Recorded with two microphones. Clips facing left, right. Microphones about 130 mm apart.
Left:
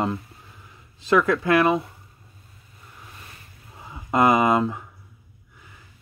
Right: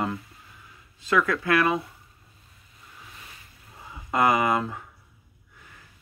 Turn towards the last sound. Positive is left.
turn(degrees=20)  # may be behind; listen again after turning